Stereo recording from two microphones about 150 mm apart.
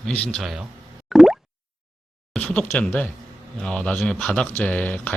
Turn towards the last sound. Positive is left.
turn(degrees=10)  # may be behind; listen again after turning